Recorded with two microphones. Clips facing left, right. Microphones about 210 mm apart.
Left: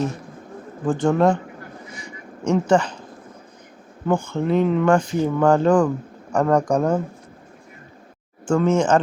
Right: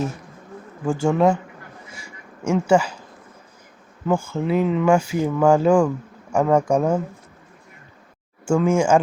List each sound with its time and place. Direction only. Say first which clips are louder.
0.9 s speech: even; 5° right (ahead or behind)
4.0 s speech: left 1 dB; 5° right (ahead or behind)
8.4 s speech: even; 10° right (ahead or behind)